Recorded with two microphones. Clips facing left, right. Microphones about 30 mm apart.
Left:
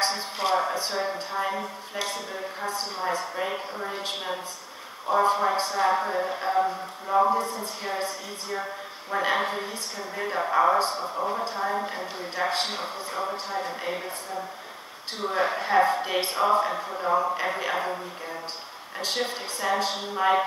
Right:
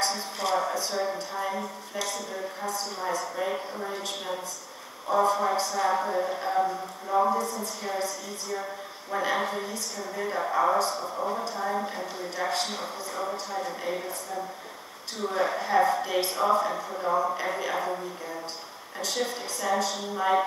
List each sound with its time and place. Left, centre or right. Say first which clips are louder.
0.0 s speech: left 2 dB; left
3.4 s speech: even; left
7.3 s speech: left 1 dB; left; by 10.8 s centre
10.8 s speech: left 1 dB; left
11.1 s a woman's voice: left 3 dB; centre
11.4 s speech: left 2 dB; left
11.7 s a woman's voice: left 1 dB; centre
12.2 s speech: left 2 dB; left
15.1 s speech: left 1 dB; left
18.9 s speech: left 1 dB; left